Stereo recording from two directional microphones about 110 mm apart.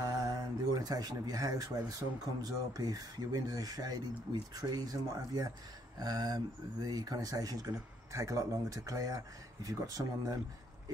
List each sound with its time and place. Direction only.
0.0 s speech: 35° right (ahead or behind)